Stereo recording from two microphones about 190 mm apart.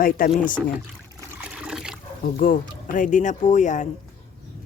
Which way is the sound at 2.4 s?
45° left (ahead or behind).